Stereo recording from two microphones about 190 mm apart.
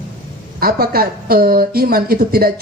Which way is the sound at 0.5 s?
50° right (ahead or behind).